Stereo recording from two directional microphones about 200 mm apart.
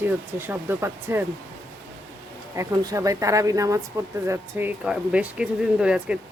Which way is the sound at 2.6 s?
15° right (ahead or behind).